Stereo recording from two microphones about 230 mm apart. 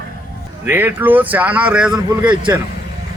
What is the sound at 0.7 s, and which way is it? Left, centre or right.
Speech, centre.